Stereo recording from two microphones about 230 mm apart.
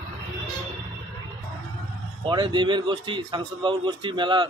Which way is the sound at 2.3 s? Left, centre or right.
Right.